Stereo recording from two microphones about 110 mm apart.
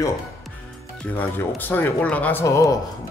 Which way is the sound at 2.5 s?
30° left (ahead or behind).